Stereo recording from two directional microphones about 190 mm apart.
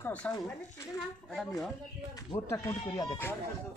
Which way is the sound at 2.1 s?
20° left (ahead or behind).